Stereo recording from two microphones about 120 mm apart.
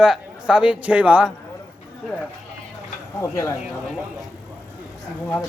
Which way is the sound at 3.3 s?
25° left (ahead or behind).